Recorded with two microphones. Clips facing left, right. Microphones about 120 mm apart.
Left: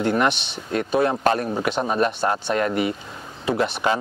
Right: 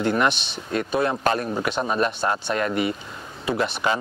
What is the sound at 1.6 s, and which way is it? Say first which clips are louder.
A man's voice: left 2 dB; 20° left (ahead or behind).